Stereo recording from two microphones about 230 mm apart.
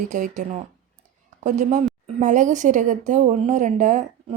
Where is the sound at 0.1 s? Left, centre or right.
Right.